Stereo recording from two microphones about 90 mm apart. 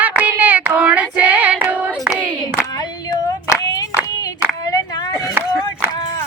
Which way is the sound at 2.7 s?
45° left (ahead or behind).